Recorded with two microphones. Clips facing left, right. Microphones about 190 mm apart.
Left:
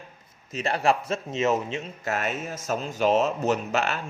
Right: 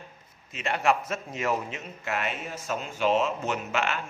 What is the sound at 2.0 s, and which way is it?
Speech, 40° left (ahead or behind).